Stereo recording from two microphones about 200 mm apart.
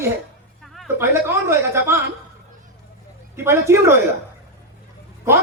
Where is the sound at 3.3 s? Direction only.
10° right (ahead or behind).